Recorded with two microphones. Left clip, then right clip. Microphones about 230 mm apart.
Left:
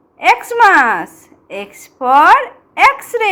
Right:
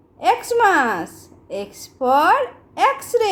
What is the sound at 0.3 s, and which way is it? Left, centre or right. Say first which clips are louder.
A woman's voice: left 6 dB; centre.